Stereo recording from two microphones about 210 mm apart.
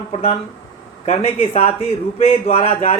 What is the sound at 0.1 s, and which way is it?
Speech, 30° left (ahead or behind).